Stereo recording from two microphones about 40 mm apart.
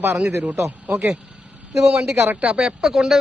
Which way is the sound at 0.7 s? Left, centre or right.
Right.